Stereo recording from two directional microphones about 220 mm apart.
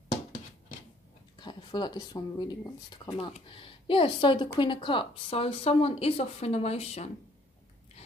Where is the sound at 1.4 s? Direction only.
20° left (ahead or behind).